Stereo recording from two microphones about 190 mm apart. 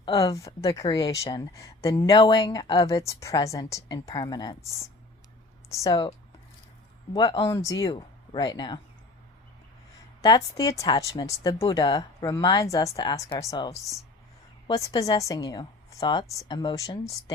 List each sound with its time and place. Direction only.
0.0 s speech: 20° left (ahead or behind)
5.6 s speech: 15° left (ahead or behind)
7.9 s speech: 25° left (ahead or behind)
10.2 s speech: 20° left (ahead or behind)
14.7 s speech: 20° left (ahead or behind)